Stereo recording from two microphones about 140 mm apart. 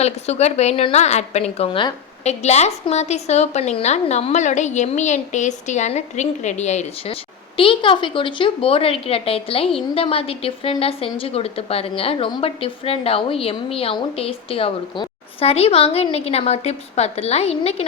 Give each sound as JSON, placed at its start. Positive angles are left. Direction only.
{"t": 0.0, "sound": "a woman's voice", "side_deg": 50}